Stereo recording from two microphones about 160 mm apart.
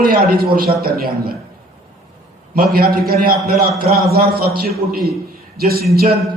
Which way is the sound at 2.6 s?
70° right (ahead or behind).